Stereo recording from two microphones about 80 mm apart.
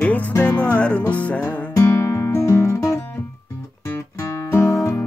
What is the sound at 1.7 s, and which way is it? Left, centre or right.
Music, left.